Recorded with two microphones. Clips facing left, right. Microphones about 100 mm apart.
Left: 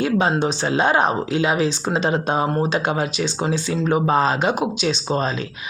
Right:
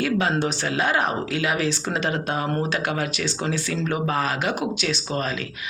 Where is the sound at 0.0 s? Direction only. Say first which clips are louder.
Left 3 dB; 25° left (ahead or behind).